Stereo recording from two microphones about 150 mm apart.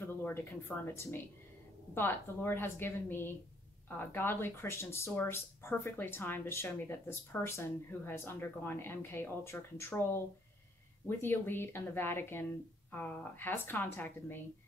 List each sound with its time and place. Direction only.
0.0 s speech: 15° left (ahead or behind)